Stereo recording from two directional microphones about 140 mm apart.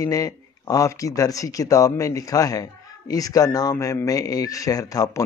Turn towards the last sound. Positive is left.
turn(degrees=25)  # may be behind; listen again after turning